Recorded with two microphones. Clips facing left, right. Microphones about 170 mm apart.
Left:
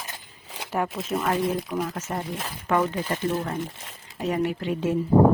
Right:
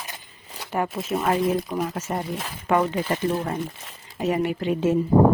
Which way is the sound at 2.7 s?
20° right (ahead or behind).